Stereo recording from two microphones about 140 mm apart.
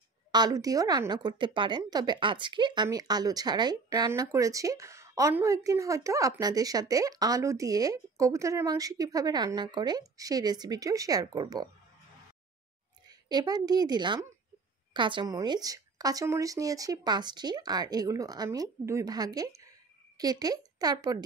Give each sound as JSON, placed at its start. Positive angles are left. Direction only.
{"t": 0.3, "sound": "a woman's voice", "side_deg": -30}
{"t": 13.0, "sound": "a woman's voice", "side_deg": -30}